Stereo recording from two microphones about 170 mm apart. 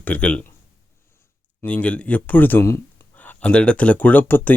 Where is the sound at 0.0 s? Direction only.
10° left (ahead or behind).